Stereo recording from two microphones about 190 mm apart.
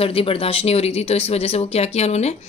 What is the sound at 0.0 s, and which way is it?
Speech, 30° left (ahead or behind).